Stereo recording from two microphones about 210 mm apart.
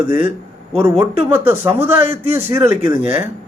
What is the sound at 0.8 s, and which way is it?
A man's voice, 10° right (ahead or behind).